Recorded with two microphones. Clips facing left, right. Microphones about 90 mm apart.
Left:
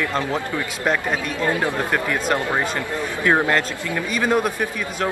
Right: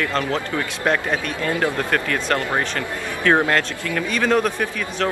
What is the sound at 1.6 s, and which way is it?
Speech, 20° left (ahead or behind).